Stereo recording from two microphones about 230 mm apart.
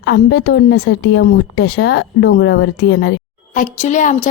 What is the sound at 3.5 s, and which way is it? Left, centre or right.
Speech, left.